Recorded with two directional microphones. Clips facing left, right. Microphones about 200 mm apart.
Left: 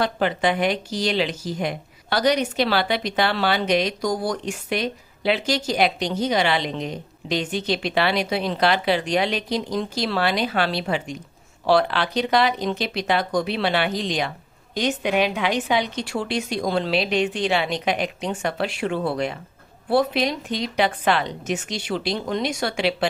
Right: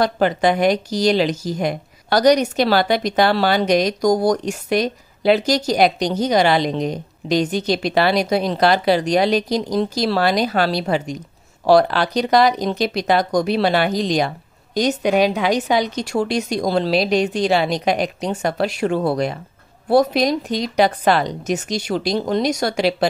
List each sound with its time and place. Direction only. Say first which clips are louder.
0.0 s speech: right 5 dB; 40° right (ahead or behind)